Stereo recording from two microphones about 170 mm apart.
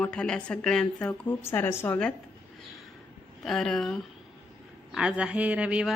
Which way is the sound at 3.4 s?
5° left (ahead or behind).